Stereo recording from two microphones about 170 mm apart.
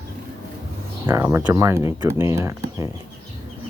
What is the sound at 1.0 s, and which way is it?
Speech, 15° right (ahead or behind).